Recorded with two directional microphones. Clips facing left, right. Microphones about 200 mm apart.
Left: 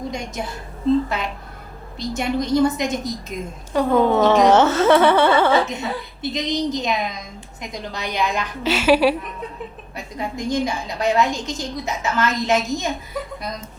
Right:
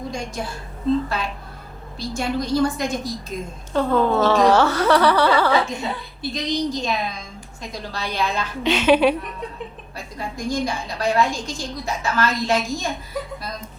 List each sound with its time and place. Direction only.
0.1 s a woman's voice: 20° left (ahead or behind)
2.0 s a woman's voice: 20° left (ahead or behind)
9.9 s a woman's voice: 20° left (ahead or behind)